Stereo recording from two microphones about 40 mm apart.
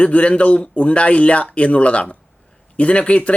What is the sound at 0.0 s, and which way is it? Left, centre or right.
Speech, left.